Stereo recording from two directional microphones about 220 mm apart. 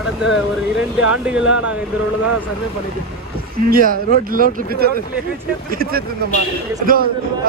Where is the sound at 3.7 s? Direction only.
40° right (ahead or behind).